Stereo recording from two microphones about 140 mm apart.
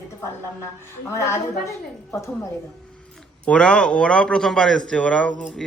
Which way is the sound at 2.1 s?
20° left (ahead or behind).